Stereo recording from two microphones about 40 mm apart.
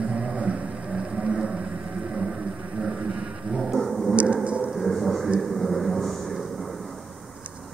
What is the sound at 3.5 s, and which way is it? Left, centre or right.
Dog, centre.